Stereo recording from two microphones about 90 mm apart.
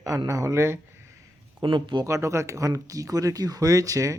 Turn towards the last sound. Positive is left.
turn(degrees=-40)  # may be behind; listen again after turning